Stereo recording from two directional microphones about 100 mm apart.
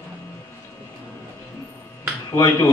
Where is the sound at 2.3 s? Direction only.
35° left (ahead or behind).